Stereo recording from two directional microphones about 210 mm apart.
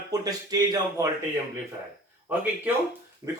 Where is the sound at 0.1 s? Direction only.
15° right (ahead or behind).